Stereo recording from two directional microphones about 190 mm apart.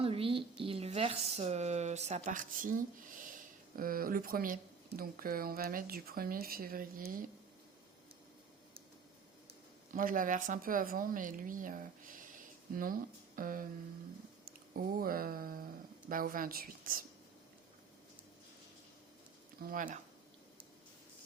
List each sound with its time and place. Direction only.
0.0 s speech: 30° right (ahead or behind); by 7.3 s 45° right (ahead or behind)
9.9 s speech: 45° right (ahead or behind)
14.7 s speech: 50° right (ahead or behind)
19.7 s speech: 45° right (ahead or behind)